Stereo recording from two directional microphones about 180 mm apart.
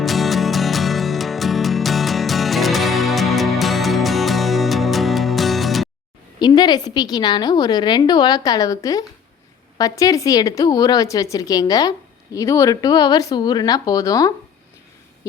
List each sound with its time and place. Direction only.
0.0 s music: centre (ahead or behind)
6.4 s speech: 25° left (ahead or behind)